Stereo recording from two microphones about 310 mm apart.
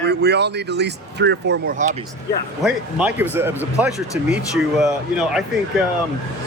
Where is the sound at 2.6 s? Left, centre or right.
Centre.